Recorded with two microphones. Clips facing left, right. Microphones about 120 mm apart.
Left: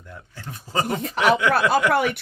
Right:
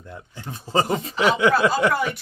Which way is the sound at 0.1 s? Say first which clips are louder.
Right 2 dB; 20° right (ahead or behind).